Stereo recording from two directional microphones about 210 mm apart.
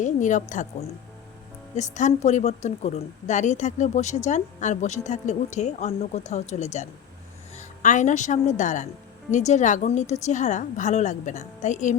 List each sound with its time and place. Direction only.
0.0 s speech: 35° left (ahead or behind)